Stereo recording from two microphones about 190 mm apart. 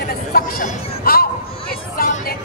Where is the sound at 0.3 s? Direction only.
50° left (ahead or behind).